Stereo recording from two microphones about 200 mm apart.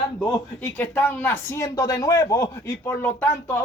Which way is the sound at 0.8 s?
10° left (ahead or behind).